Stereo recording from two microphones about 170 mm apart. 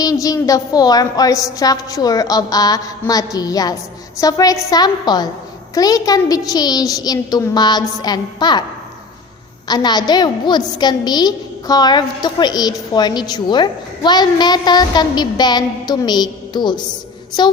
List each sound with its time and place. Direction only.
0.0 s a woman's voice: 20° left (ahead or behind)
9.6 s a woman's voice: 25° left (ahead or behind)